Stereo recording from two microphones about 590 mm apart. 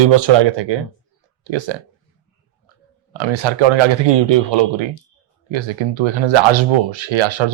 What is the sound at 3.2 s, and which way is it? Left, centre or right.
Speech, right.